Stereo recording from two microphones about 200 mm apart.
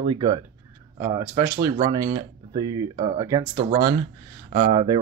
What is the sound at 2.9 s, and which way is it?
Speech, 30° right (ahead or behind).